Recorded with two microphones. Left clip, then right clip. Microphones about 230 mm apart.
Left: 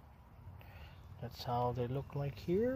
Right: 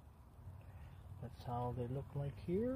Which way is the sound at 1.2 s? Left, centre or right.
Left.